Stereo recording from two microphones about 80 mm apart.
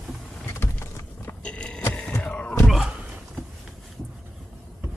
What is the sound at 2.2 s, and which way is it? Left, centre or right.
Music, centre.